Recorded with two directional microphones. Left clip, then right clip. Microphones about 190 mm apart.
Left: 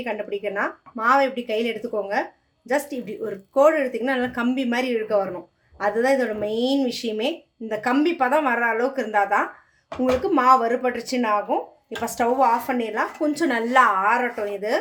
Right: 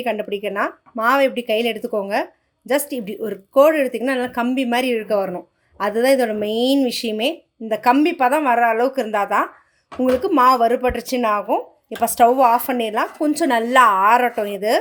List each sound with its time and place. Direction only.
0.0 s speech: 45° right (ahead or behind)